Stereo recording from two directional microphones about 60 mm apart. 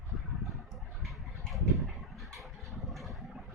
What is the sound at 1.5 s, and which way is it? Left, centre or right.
Vehicle, centre.